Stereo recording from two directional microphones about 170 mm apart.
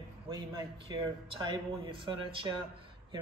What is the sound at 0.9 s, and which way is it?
Speech, 25° right (ahead or behind).